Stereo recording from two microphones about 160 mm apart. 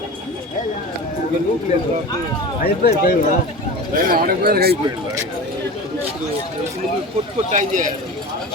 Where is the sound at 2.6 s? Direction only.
70° left (ahead or behind).